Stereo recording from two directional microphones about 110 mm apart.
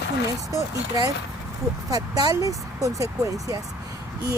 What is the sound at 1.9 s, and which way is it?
Speech, 35° right (ahead or behind).